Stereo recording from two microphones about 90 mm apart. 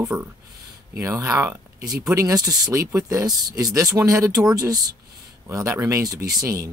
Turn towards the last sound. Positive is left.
turn(degrees=-40)  # may be behind; listen again after turning